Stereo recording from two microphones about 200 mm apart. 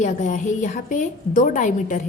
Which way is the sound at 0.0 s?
35° left (ahead or behind).